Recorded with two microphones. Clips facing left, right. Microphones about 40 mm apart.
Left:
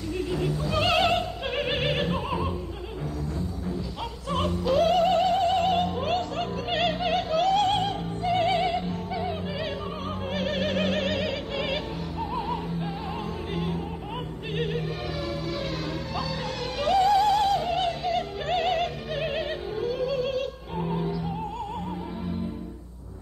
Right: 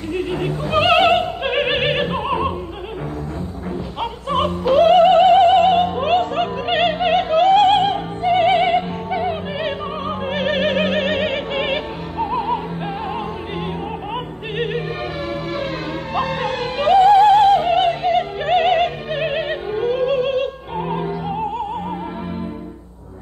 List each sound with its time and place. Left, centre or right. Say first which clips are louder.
0.1 s opera: right 6 dB; right
4.0 s music: right 10 dB; right
16.2 s music: right 13 dB; right